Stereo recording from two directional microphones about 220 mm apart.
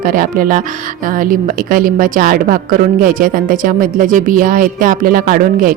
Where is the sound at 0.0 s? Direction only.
40° right (ahead or behind).